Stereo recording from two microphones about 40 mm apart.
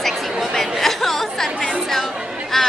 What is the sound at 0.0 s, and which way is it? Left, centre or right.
Chatter, centre.